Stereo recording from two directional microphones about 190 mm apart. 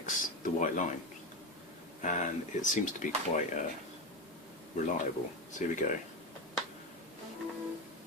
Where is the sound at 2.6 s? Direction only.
45° left (ahead or behind).